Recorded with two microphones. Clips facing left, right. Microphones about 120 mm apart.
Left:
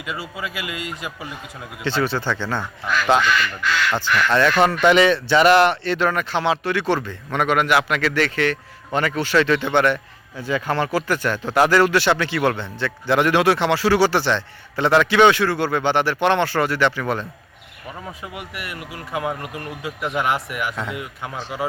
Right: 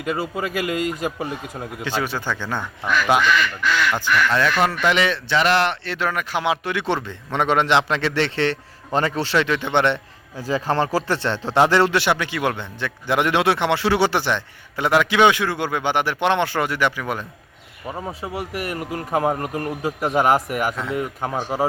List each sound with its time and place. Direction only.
0.0 s a man's voice: 45° right (ahead or behind)
1.8 s a man's voice: 10° right (ahead or behind)
3.9 s a man's voice: 5° right (ahead or behind); by 9.5 s 25° right (ahead or behind)
9.5 s a man's voice: 15° right (ahead or behind)
17.9 s speech: 30° right (ahead or behind)